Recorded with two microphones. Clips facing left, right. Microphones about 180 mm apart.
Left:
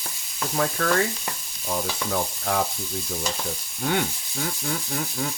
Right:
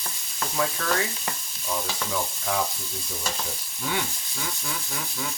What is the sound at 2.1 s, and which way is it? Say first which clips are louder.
Speech: left 2 dB; 55° left (ahead or behind).